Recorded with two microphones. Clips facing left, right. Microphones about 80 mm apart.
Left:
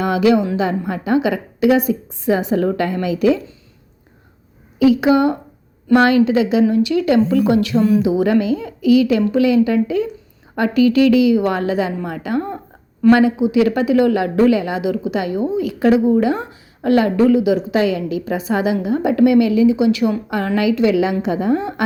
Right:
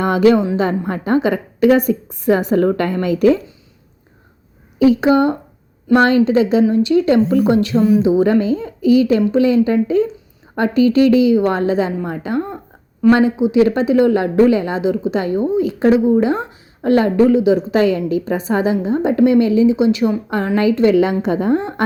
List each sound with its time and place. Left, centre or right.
0.0 s a woman's voice: right
4.8 s a woman's voice: right